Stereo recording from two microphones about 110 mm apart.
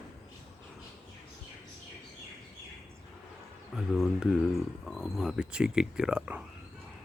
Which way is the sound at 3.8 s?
Centre (ahead or behind).